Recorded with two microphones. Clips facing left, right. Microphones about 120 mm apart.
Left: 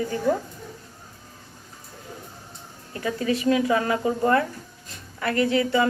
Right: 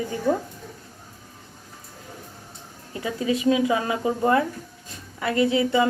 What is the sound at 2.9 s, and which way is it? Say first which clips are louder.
A woman's voice: even; 15° right (ahead or behind).